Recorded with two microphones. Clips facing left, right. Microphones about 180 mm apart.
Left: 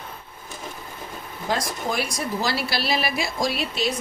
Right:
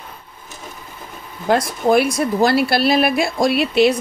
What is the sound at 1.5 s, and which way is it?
Speech, 60° right (ahead or behind).